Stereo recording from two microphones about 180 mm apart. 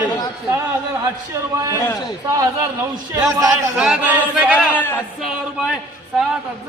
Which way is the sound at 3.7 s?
5° right (ahead or behind).